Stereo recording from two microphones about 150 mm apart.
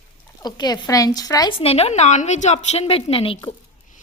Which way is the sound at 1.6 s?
40° left (ahead or behind).